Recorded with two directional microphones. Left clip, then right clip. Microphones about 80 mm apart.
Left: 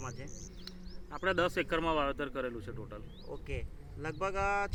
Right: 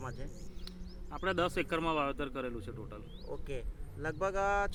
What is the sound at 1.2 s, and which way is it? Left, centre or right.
Speech, right.